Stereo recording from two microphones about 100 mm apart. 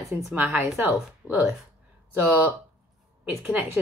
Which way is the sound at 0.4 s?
20° right (ahead or behind).